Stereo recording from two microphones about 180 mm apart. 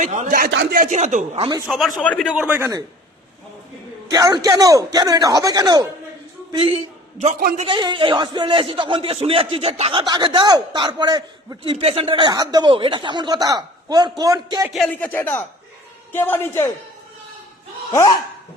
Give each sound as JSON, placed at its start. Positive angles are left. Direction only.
{"t": 0.0, "sound": "speech", "side_deg": -40}
{"t": 0.9, "sound": "a man's voice", "side_deg": -40}
{"t": 1.6, "sound": "a man's voice", "side_deg": 5}
{"t": 2.3, "sound": "a man's voice", "side_deg": -10}
{"t": 4.1, "sound": "a man's voice", "side_deg": -20}
{"t": 7.3, "sound": "speech", "side_deg": -50}
{"t": 7.6, "sound": "a man's voice", "side_deg": -25}
{"t": 14.7, "sound": "speech", "side_deg": 0}
{"t": 15.1, "sound": "a man's voice", "side_deg": 10}